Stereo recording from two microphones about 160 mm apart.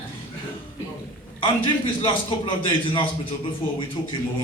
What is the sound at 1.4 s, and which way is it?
A man's voice, 30° left (ahead or behind).